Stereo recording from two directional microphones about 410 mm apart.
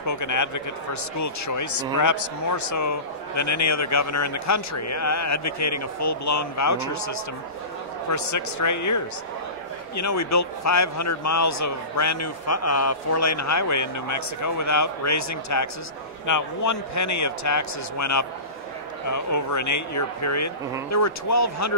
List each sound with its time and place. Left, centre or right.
0.0 s a man's voice: left